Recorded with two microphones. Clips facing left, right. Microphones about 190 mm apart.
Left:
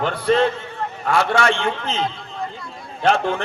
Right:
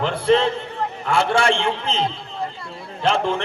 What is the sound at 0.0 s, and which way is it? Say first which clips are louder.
A man's voice: even; 30° right (ahead or behind).